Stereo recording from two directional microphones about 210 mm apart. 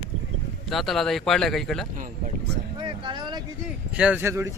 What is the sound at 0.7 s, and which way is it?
Speech, centre (ahead or behind).